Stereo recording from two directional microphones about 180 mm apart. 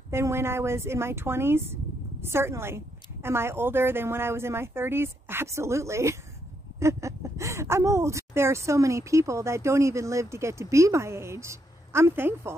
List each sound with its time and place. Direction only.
0.1 s speech: 15° right (ahead or behind)